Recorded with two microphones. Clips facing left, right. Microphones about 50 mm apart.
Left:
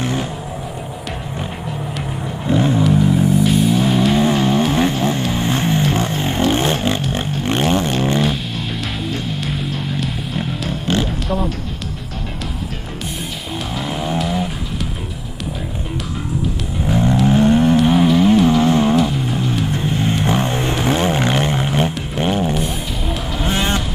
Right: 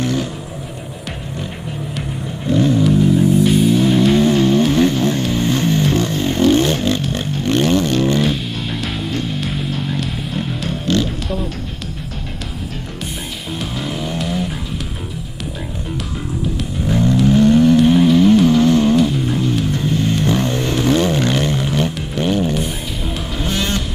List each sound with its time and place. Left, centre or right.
0.0 s vehicle: left
2.4 s vehicle: left
3.4 s music: centre
4.2 s vehicle: centre
5.8 s a sound: centre
8.8 s music: centre
14.1 s music: centre
16.8 s vehicle: left
17.7 s vehicle: centre
18.9 s music: centre
20.2 s vehicle: left
22.1 s a sound: left
22.5 s music: centre
23.4 s music: left